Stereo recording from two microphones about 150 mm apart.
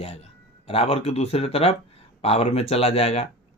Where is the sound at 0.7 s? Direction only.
40° left (ahead or behind).